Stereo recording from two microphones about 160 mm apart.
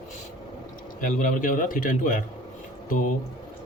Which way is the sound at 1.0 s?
55° left (ahead or behind).